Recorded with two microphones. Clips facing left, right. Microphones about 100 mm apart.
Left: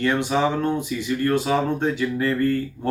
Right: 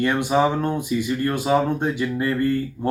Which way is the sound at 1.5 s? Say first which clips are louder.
Right 1 dB; 10° right (ahead or behind).